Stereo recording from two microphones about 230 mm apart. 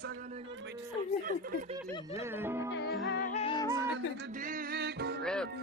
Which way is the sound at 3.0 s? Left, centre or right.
Left.